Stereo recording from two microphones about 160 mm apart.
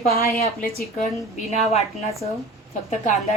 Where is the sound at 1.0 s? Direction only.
50° left (ahead or behind).